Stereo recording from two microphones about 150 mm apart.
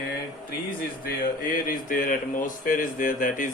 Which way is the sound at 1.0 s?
65° left (ahead or behind).